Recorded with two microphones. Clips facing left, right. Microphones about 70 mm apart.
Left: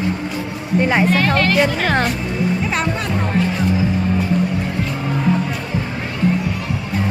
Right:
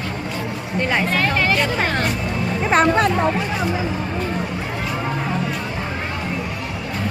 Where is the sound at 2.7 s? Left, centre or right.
Right.